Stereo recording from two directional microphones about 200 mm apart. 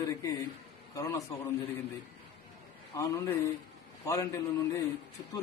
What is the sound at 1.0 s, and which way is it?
Speech, 15° left (ahead or behind).